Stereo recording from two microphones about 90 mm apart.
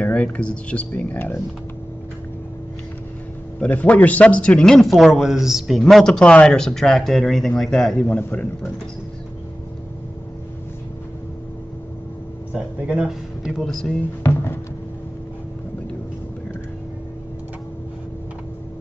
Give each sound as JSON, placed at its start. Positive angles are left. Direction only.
{"t": 0.0, "sound": "speech", "side_deg": 15}
{"t": 3.6, "sound": "a man's voice", "side_deg": 15}
{"t": 12.8, "sound": "a man's voice", "side_deg": -10}
{"t": 14.2, "sound": "music", "side_deg": 25}